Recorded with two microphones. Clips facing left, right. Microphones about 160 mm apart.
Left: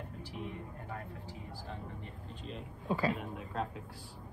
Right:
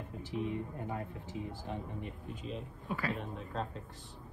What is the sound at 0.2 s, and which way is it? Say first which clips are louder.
Speech: right 9 dB; 20° right (ahead or behind).